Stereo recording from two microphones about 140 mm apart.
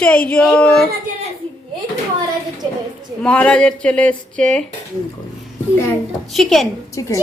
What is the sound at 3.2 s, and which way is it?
Speech, 10° left (ahead or behind).